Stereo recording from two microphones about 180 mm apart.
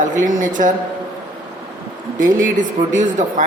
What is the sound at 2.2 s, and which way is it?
Speech, 45° right (ahead or behind).